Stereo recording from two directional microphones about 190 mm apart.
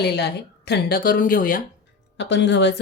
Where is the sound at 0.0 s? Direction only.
55° left (ahead or behind).